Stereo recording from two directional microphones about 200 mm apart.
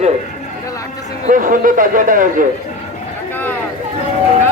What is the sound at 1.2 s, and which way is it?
Speech, 40° right (ahead or behind).